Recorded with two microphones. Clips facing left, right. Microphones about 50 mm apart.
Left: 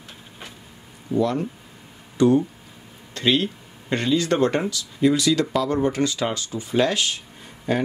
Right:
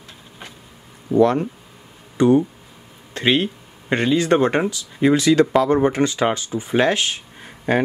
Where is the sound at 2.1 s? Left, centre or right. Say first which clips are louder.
Right 2 dB; right.